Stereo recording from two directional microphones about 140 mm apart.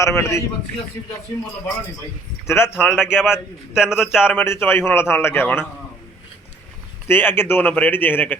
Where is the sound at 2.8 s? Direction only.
5° right (ahead or behind).